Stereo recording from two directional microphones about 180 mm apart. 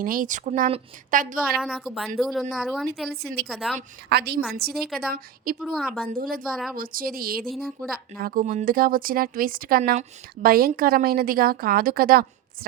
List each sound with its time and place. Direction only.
0.0 s speech: 50° right (ahead or behind)
1.5 s a woman's voice: centre (ahead or behind)
3.1 s speech: 60° right (ahead or behind)
3.4 s a woman's voice: centre (ahead or behind)
4.1 s speech: 60° right (ahead or behind)
5.5 s a woman's voice: 5° right (ahead or behind)
6.1 s speech: 50° right (ahead or behind)